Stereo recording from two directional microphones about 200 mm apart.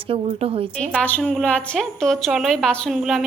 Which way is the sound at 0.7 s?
5° left (ahead or behind).